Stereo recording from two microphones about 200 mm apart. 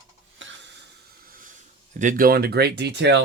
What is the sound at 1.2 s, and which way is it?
Hiss, 45° right (ahead or behind).